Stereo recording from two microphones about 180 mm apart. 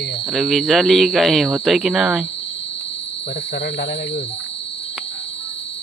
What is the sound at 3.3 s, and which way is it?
Speech, 70° left (ahead or behind).